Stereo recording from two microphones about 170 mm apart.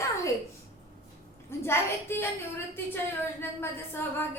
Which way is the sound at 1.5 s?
15° left (ahead or behind).